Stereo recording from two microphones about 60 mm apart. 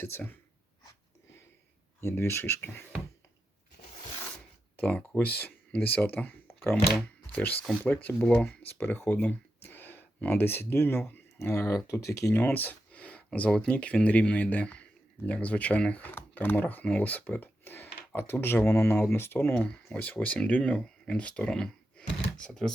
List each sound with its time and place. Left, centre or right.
0.0 s speech: left
2.0 s speech: left
4.8 s speech: left
7.3 s speech: left
8.3 s speech: centre
8.6 s speech: left
9.0 s a sound: left
10.3 s speech: left
11.3 s speech: left
12.3 s speech: left
16.1 s speech: left
19.5 s speech: centre